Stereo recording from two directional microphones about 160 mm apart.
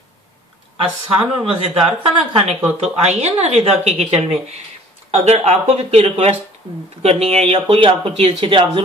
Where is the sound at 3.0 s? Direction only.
40° right (ahead or behind).